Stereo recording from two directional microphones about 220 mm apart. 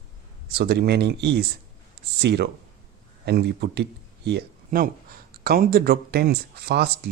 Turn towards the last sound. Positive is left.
turn(degrees=-50)  # may be behind; listen again after turning